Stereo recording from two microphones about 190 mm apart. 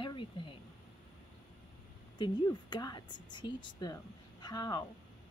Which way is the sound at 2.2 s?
20° left (ahead or behind).